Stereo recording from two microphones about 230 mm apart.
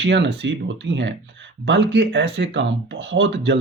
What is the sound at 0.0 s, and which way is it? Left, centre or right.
Speech, right.